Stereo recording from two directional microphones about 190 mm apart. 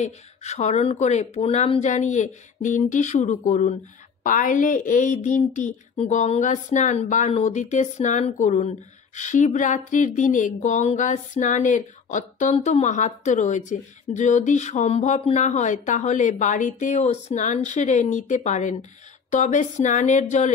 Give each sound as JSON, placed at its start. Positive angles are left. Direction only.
{"t": 0.0, "sound": "a woman's voice", "side_deg": 35}